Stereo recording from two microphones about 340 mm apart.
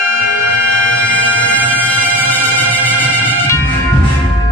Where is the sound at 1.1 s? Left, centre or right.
Centre.